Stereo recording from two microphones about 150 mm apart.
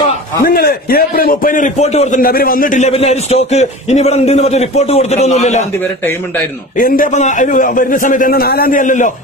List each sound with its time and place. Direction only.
0.4 s a man's voice: 85° left; by 2.9 s 60° left (ahead or behind)
2.9 s a man's voice: 45° left (ahead or behind)
6.8 s a man's voice: 60° left (ahead or behind)